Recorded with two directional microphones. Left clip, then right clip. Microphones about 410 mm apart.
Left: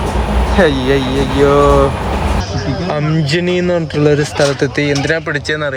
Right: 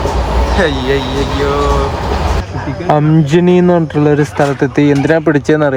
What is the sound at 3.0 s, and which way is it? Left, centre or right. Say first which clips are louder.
Speech: right 5 dB; centre.